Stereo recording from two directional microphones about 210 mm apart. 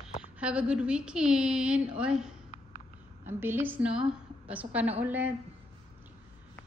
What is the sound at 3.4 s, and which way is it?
A woman's voice, 10° right (ahead or behind).